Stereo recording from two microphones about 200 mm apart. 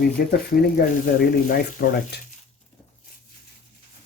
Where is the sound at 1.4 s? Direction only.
45° left (ahead or behind).